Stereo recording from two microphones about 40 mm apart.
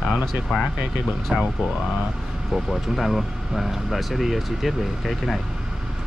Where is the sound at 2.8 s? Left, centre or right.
Centre.